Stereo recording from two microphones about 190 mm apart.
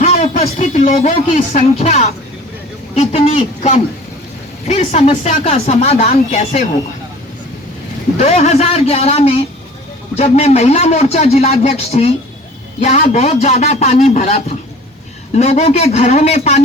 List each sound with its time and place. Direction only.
0.0 s speech: 35° left (ahead or behind)
8.2 s speech: 35° left (ahead or behind)